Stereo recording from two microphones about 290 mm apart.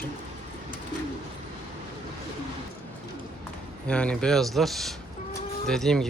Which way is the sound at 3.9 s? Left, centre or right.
Centre.